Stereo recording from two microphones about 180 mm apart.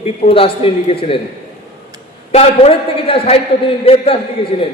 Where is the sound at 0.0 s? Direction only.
35° left (ahead or behind).